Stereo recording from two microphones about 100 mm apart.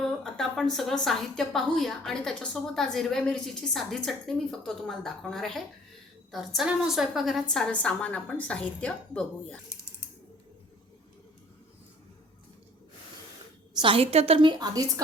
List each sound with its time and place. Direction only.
0.0 s a woman's voice: 5° left (ahead or behind)
13.7 s a woman's voice: 60° right (ahead or behind); by 14.5 s 80° right
14.6 s a woman's voice: 35° right (ahead or behind)